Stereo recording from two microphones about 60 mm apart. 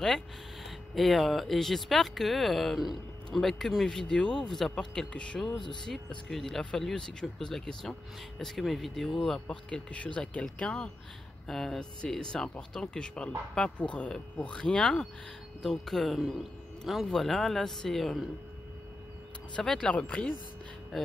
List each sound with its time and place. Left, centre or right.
0.7 s speech: centre
9.5 s speech: left; by 18.2 s centre
19.5 s speech: centre
20.9 s speech: centre